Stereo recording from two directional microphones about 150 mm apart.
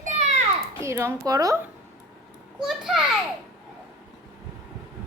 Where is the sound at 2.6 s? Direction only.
5° right (ahead or behind).